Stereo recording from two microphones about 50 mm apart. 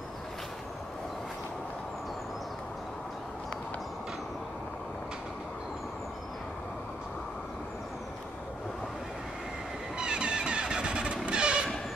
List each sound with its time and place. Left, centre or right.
9.9 s vehicle: centre